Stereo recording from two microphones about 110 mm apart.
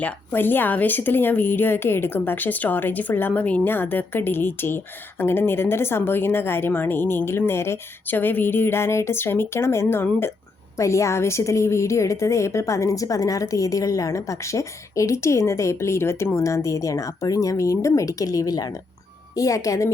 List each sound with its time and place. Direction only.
0.0 s a woman's voice: 15° left (ahead or behind)